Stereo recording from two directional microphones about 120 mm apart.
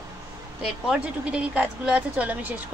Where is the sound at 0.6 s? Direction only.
5° right (ahead or behind).